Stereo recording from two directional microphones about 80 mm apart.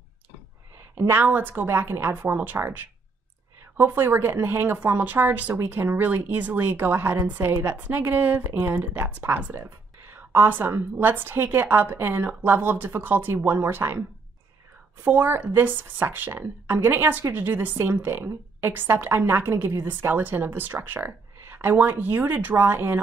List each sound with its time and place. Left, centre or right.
0.9 s a woman's voice: right
15.0 s a woman's voice: right